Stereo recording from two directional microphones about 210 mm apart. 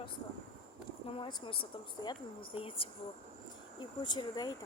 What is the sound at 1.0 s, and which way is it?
Speech, 25° left (ahead or behind).